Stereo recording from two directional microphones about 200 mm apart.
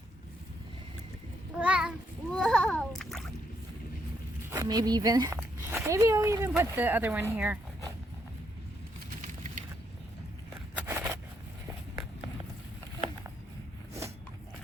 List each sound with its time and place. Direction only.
1.5 s child singing: 5° right (ahead or behind)
2.3 s splash: 5° left (ahead or behind)
4.4 s speech: 15° right (ahead or behind)
10.8 s a sound: 10° right (ahead or behind)